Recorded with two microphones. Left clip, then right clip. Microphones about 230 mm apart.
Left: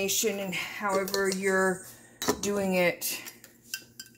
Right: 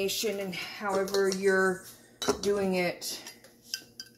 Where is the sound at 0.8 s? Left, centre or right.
Left.